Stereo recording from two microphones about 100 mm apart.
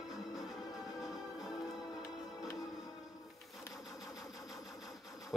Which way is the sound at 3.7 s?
Centre (ahead or behind).